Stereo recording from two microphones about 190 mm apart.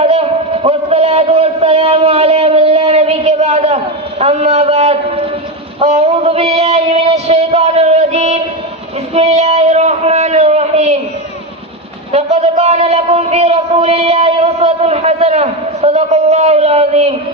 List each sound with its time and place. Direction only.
0.0 s a sound: 30° right (ahead or behind)
5.8 s a man's voice: 35° right (ahead or behind)
12.1 s a man's voice: 35° right (ahead or behind)